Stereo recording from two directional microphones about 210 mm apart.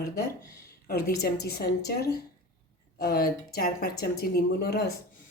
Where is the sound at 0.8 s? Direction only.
45° left (ahead or behind).